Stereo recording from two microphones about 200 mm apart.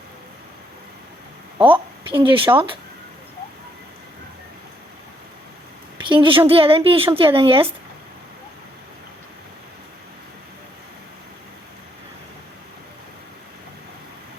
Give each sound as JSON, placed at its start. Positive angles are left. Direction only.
{"t": 1.5, "sound": "speech", "side_deg": -25}
{"t": 6.1, "sound": "speech", "side_deg": -25}